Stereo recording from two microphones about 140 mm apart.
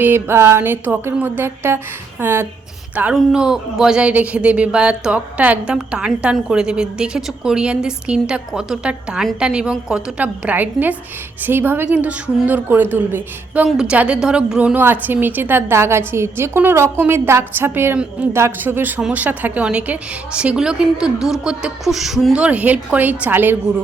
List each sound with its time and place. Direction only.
0.0 s speech: 15° right (ahead or behind)